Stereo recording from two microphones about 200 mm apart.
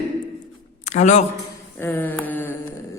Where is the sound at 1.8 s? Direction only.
10° left (ahead or behind).